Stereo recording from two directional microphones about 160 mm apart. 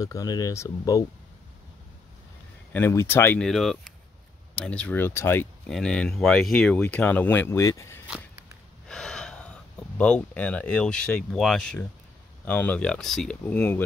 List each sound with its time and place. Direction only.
0.0 s speech: 20° left (ahead or behind)
2.7 s speech: 15° left (ahead or behind)
3.3 s speech: centre (ahead or behind); by 8.0 s 20° left (ahead or behind)
8.8 s a sound: 5° left (ahead or behind)
12.4 s speech: 10° left (ahead or behind)